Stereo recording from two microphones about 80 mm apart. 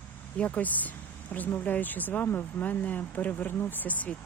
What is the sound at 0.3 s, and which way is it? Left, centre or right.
Speech, centre.